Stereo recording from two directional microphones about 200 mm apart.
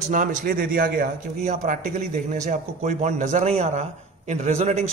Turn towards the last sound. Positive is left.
turn(degrees=-35)  # may be behind; listen again after turning